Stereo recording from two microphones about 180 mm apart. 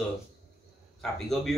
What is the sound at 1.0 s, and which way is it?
Speech, centre (ahead or behind).